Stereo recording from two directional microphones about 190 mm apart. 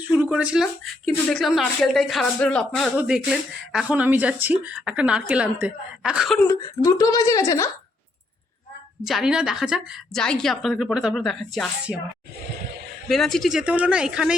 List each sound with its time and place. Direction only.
0.1 s speech: 10° right (ahead or behind)
6.5 s speech: 20° left (ahead or behind)
9.0 s speech: centre (ahead or behind)
13.1 s speech: centre (ahead or behind)